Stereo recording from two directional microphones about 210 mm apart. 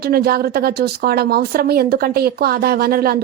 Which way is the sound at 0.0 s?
45° right (ahead or behind).